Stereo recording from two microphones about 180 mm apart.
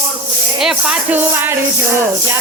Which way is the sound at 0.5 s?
5° right (ahead or behind).